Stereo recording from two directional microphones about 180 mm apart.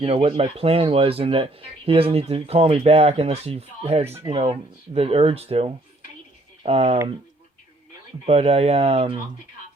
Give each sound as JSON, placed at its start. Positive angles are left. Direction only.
{"t": 0.0, "sound": "speech", "side_deg": -30}
{"t": 8.3, "sound": "speech", "side_deg": -35}